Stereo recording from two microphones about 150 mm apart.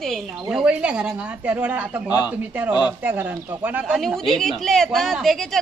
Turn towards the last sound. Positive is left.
turn(degrees=0)  # may be behind; listen again after turning